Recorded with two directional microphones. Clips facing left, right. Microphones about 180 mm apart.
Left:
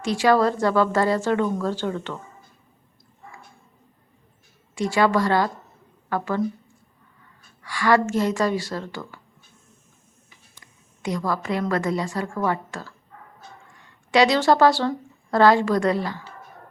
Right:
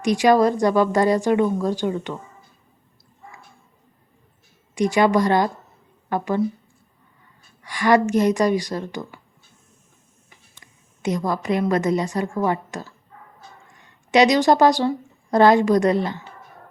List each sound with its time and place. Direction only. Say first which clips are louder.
0.0 s a woman's voice: right 3 dB; 15° right (ahead or behind)
4.7 s a woman's voice: right 3 dB; 20° right (ahead or behind)
7.6 s a woman's voice: right 2 dB; 20° right (ahead or behind)
11.0 s a woman's voice: right 3 dB; 20° right (ahead or behind)